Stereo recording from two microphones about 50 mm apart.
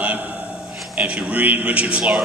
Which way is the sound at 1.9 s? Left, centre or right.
Centre.